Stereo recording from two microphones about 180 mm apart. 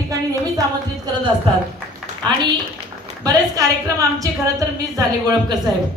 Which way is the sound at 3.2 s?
20° right (ahead or behind).